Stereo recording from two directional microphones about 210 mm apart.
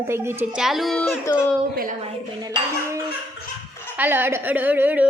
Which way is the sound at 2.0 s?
25° right (ahead or behind).